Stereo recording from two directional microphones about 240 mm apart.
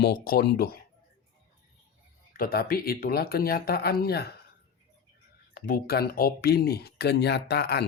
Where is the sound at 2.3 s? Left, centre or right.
Left.